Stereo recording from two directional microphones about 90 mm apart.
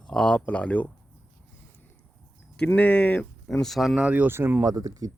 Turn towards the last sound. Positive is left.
turn(degrees=-40)  # may be behind; listen again after turning